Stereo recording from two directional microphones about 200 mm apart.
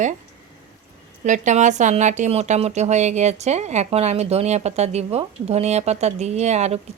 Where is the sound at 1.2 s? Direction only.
35° right (ahead or behind).